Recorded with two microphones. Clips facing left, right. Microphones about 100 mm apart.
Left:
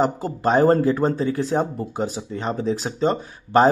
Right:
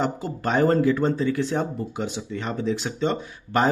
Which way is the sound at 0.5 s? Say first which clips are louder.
Left 3 dB; 35° left (ahead or behind).